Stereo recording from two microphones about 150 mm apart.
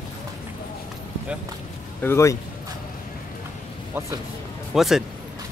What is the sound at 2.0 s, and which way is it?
Speech, 15° left (ahead or behind).